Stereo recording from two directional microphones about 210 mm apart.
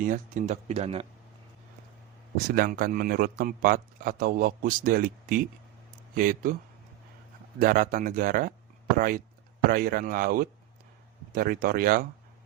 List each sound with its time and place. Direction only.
0.0 s a man's voice: 35° right (ahead or behind)
2.6 s a man's voice: 40° right (ahead or behind)
7.6 s a man's voice: 40° right (ahead or behind)